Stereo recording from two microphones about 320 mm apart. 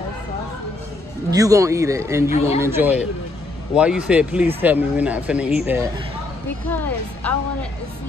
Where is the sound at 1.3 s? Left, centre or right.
Centre.